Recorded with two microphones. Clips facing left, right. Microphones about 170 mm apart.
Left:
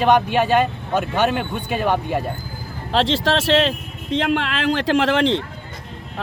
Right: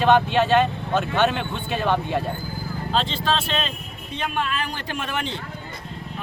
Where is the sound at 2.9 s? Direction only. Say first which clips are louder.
Left 6 dB; 90° left.